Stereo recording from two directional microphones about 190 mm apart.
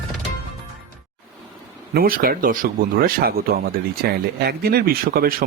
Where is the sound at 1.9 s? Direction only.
50° right (ahead or behind).